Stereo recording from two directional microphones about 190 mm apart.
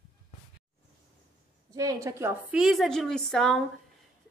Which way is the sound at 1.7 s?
20° right (ahead or behind).